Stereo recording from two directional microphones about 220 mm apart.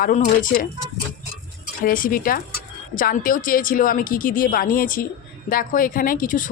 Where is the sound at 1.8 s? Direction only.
40° left (ahead or behind).